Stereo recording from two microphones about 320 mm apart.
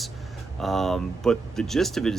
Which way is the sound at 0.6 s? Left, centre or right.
Centre.